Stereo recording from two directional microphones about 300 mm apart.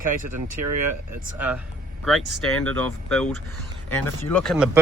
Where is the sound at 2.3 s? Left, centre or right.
Centre.